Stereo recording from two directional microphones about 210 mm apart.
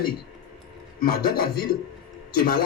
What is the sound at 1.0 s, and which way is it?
Speech, 45° left (ahead or behind).